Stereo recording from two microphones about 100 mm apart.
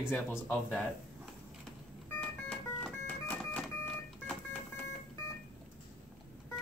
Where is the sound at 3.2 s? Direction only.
10° left (ahead or behind).